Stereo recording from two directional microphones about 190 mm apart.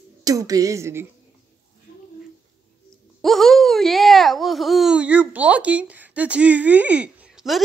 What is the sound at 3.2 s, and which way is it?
Speech, centre (ahead or behind).